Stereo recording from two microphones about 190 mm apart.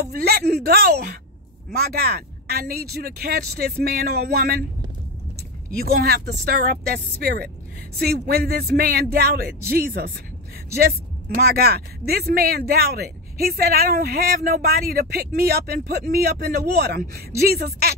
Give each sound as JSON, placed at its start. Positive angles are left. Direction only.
{"t": 0.0, "sound": "speech", "side_deg": -55}
{"t": 5.9, "sound": "speech", "side_deg": -55}